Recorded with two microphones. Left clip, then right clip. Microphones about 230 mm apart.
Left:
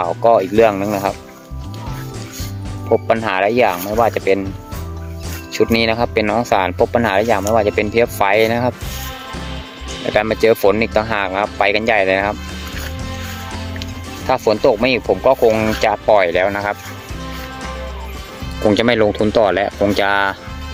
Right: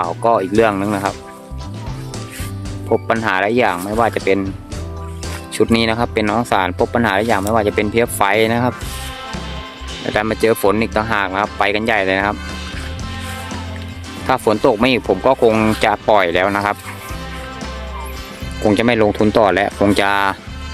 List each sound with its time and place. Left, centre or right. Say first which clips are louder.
0.0 s speech: left 2 dB; centre
2.9 s speech: left 1 dB; centre
5.5 s speech: left 1 dB; centre
10.0 s speech: left 2 dB; centre
14.3 s speech: even; centre
18.6 s speech: even; centre